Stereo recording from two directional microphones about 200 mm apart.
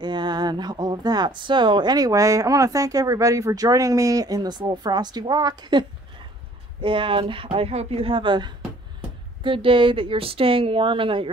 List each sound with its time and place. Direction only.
0.0 s speech: 20° right (ahead or behind)